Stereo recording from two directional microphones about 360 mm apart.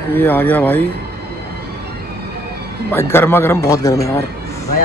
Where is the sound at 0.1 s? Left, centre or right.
Centre.